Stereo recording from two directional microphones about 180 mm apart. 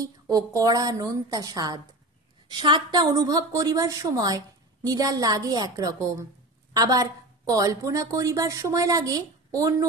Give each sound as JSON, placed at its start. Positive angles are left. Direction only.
{"t": 0.0, "sound": "a woman's voice", "side_deg": -20}